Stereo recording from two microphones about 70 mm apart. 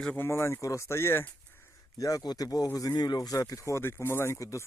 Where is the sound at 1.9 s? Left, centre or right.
Left.